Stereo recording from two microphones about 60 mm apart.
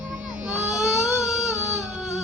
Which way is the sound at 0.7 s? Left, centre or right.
Centre.